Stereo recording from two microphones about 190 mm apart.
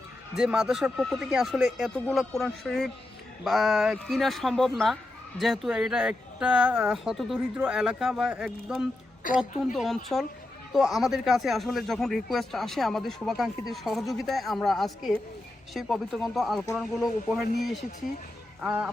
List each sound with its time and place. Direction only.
0.3 s speech: 5° right (ahead or behind)
9.2 s a woman's voice: 45° left (ahead or behind)
9.7 s speech: centre (ahead or behind)